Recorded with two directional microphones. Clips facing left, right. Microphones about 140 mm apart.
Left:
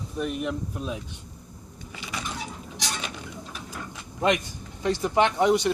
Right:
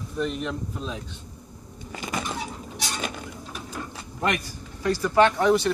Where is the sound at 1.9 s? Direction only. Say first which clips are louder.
Right 4 dB; 45° right (ahead or behind).